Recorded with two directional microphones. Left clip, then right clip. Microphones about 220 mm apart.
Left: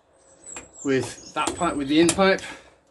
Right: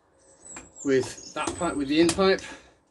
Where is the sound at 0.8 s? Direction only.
20° left (ahead or behind).